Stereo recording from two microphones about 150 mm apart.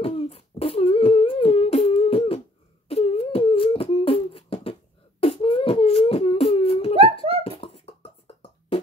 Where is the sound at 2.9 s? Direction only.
40° left (ahead or behind).